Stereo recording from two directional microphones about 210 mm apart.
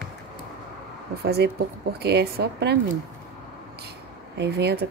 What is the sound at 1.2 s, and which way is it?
Speech, 50° right (ahead or behind).